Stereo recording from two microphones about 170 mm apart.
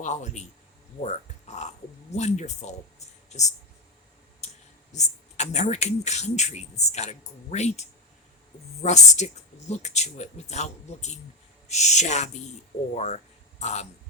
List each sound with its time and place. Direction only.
0.0 s speech: 45° left (ahead or behind)
1.0 s a sound: 40° left (ahead or behind)
2.1 s speech: 45° left (ahead or behind)